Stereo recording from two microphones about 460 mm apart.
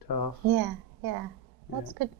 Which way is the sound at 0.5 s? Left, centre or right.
Right.